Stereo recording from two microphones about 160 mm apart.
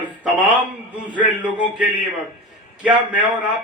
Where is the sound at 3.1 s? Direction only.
10° right (ahead or behind).